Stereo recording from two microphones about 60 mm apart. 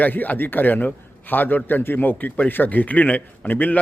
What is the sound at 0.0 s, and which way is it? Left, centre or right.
A man's voice, left.